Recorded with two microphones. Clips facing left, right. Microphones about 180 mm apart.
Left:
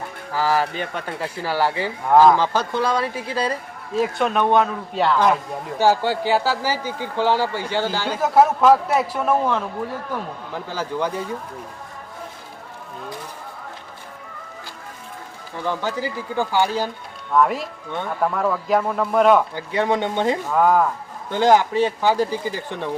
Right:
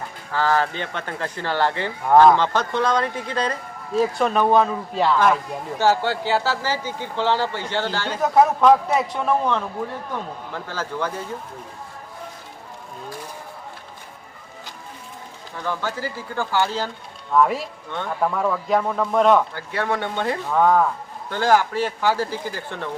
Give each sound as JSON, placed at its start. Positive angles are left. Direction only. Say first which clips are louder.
{"t": 0.3, "sound": "speech", "louder": "even", "side_deg": 10}
{"t": 5.8, "sound": "speech", "louder": "left 2 dB", "side_deg": 15}
{"t": 15.6, "sound": "speech", "louder": "left 2 dB", "side_deg": 15}
{"t": 17.3, "sound": "speech", "louder": "even", "side_deg": 0}
{"t": 19.5, "sound": "speech", "louder": "left 4 dB", "side_deg": 15}
{"t": 20.5, "sound": "speech", "louder": "right 1 dB", "side_deg": 5}
{"t": 21.2, "sound": "speech", "louder": "left 3 dB", "side_deg": 20}